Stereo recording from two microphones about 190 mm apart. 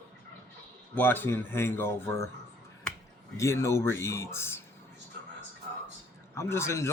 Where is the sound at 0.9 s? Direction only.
10° left (ahead or behind).